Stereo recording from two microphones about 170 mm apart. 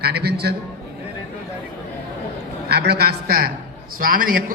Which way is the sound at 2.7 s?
70° right (ahead or behind).